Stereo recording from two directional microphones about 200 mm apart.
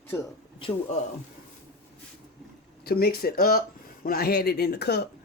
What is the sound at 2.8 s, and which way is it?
Speech, 50° left (ahead or behind).